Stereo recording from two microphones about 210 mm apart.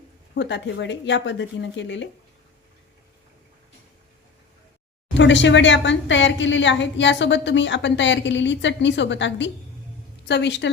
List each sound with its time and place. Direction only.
0.3 s a woman's voice: 60° left (ahead or behind)
5.1 s a woman's voice: 60° left (ahead or behind)